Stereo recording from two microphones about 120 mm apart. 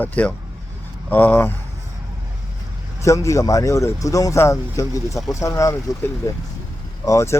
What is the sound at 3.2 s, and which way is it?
Speech, 25° left (ahead or behind).